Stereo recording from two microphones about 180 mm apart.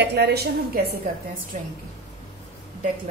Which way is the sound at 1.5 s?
45° right (ahead or behind).